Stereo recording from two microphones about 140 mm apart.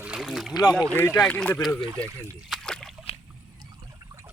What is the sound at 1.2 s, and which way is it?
Speech, 5° left (ahead or behind).